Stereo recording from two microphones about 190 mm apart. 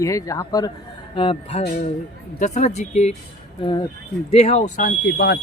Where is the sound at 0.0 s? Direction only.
15° left (ahead or behind); by 3.2 s 35° left (ahead or behind).